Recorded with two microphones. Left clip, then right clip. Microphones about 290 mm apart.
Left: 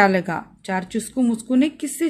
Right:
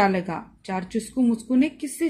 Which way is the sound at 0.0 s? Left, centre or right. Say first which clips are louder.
Left 5 dB; left.